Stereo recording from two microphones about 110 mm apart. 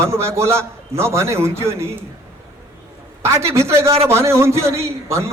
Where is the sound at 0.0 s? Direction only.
25° right (ahead or behind).